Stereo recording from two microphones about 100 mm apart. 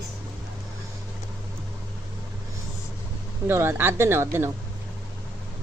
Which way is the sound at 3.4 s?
25° right (ahead or behind).